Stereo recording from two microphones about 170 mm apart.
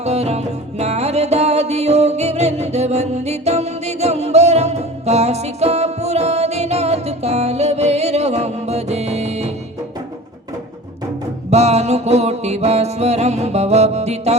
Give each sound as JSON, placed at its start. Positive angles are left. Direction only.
{"t": 0.0, "sound": "music", "side_deg": -40}
{"t": 11.5, "sound": "music", "side_deg": -40}